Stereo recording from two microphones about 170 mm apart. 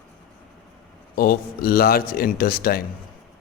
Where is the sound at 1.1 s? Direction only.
65° left (ahead or behind).